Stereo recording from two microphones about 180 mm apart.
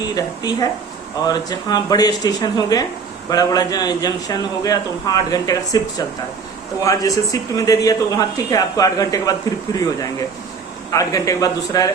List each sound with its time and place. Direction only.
0.2 s a man's voice: 20° left (ahead or behind)
10.9 s a man's voice: 20° left (ahead or behind)